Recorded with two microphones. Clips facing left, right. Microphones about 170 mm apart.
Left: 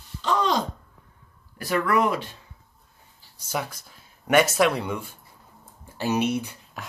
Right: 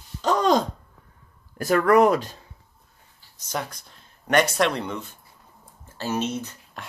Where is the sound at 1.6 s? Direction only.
45° right (ahead or behind).